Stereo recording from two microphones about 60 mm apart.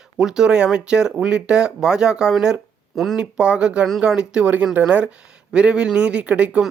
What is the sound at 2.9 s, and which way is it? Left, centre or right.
Speech, centre.